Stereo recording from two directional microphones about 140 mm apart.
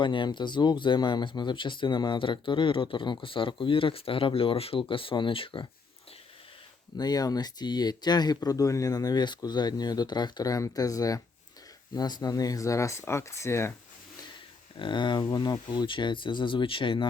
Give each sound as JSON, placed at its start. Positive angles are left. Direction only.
{"t": 0.0, "sound": "speech", "side_deg": 35}
{"t": 6.9, "sound": "speech", "side_deg": 30}
{"t": 14.8, "sound": "speech", "side_deg": 35}